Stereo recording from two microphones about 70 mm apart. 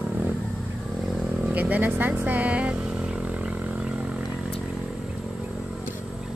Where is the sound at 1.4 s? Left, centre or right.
Right.